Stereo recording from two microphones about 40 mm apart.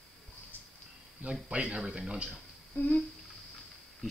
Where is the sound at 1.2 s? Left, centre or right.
Right.